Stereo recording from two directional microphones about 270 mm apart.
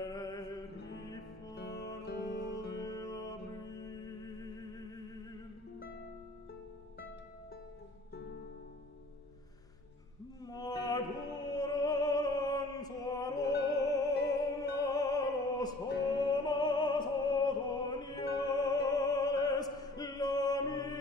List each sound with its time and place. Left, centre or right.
0.0 s music: centre
1.5 s music: left
2.8 s music: centre
10.4 s music: centre